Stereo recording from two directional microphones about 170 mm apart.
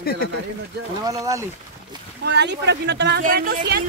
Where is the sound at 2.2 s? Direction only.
85° right.